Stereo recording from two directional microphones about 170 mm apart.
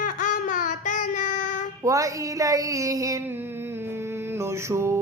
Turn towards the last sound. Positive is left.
turn(degrees=-15)  # may be behind; listen again after turning